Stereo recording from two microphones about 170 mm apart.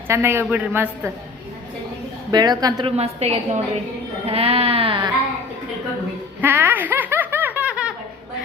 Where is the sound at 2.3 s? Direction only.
25° right (ahead or behind).